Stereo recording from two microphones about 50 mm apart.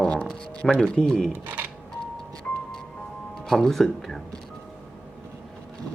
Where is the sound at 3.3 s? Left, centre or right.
Centre.